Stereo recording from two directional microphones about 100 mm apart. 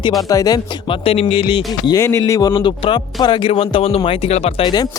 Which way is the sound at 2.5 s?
60° left (ahead or behind).